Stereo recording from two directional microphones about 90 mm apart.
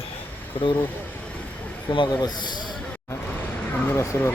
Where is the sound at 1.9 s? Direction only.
65° left (ahead or behind).